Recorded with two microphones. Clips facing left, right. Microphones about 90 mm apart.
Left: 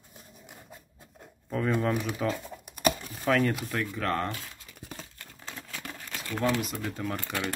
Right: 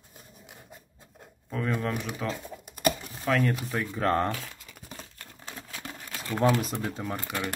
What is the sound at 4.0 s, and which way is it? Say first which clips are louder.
Speech: right 6 dB; 30° right (ahead or behind).